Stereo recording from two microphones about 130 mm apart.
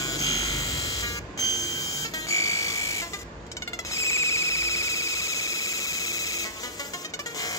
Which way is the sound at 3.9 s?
20° left (ahead or behind).